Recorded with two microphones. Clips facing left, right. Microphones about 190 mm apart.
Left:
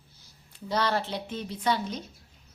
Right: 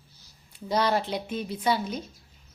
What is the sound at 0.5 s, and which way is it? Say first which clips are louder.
A woman's voice: right 3 dB; 10° right (ahead or behind).